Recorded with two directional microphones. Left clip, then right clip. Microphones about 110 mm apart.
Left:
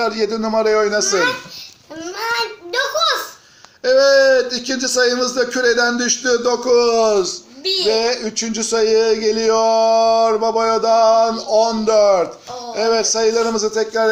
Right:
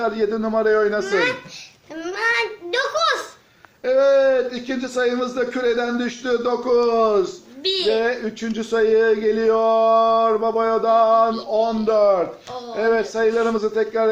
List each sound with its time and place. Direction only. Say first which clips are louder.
0.2 s speech: left 3 dB; 20° left (ahead or behind)
2.9 s a sound: left 3 dB; 15° right (ahead or behind)
3.8 s speech: left 4 dB; 20° left (ahead or behind)
7.6 s a woman's voice: left 2 dB; 5° right (ahead or behind)
7.9 s speech: left 3 dB; 15° left (ahead or behind)